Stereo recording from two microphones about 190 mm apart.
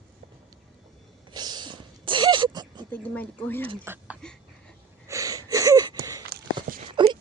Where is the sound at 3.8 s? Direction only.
10° right (ahead or behind).